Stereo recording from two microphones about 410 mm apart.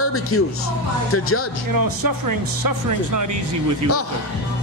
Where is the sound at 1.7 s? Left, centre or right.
Right.